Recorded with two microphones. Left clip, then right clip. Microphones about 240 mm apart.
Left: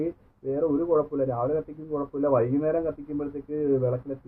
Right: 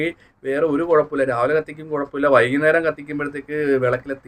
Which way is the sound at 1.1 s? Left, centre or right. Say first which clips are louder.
Right 8 dB; right.